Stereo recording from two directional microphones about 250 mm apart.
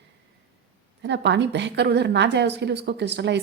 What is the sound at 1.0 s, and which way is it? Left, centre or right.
A woman's voice, right.